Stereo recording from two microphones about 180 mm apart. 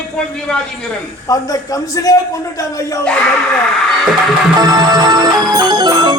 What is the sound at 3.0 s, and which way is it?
Speech, 5° left (ahead or behind).